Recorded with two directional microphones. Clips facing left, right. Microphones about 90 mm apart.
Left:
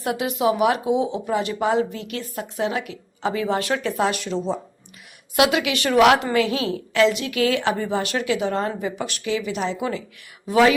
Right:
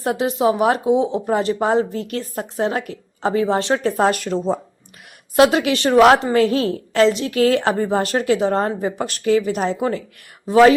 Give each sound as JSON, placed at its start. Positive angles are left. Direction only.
{"t": 0.0, "sound": "speech", "side_deg": -35}